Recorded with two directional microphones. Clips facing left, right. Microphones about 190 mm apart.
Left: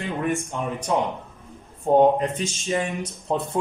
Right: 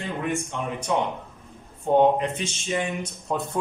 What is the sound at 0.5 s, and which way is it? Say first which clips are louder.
Speech: left 2 dB; 40° left (ahead or behind).